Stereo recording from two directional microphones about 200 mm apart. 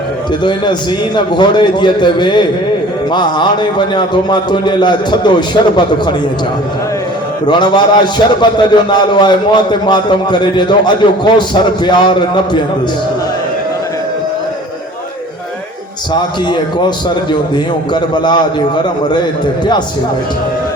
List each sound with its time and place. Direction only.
0.4 s a man's voice: 20° left (ahead or behind)
7.4 s a man's voice: 20° left (ahead or behind)
17.5 s a man's voice: 20° left (ahead or behind)